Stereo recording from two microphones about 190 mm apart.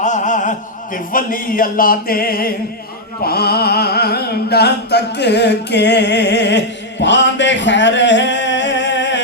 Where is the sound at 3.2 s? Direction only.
55° left (ahead or behind).